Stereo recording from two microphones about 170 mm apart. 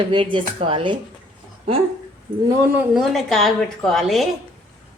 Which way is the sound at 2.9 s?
Centre (ahead or behind).